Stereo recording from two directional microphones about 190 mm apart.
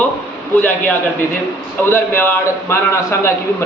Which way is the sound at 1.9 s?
10° left (ahead or behind).